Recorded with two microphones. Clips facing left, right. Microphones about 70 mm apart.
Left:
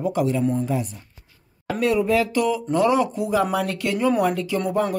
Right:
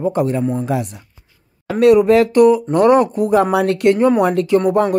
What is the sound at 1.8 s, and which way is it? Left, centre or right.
Speech, right.